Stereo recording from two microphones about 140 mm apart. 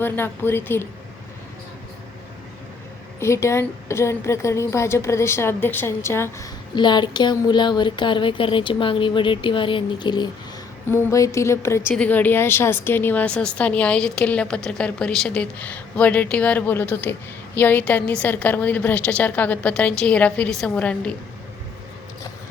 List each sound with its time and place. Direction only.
0.0 s a woman's voice: 15° left (ahead or behind)
3.2 s a woman's voice: 20° left (ahead or behind)
6.7 s speech: 30° left (ahead or behind)
10.8 s a woman's voice: 20° left (ahead or behind)